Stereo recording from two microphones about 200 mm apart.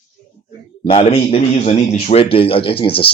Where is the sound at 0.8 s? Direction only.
30° left (ahead or behind).